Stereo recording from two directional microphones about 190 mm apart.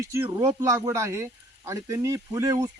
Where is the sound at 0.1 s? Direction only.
15° right (ahead or behind).